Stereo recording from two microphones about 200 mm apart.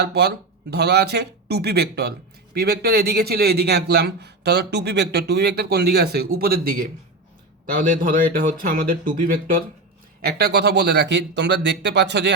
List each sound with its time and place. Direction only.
0.0 s speech: 55° right (ahead or behind)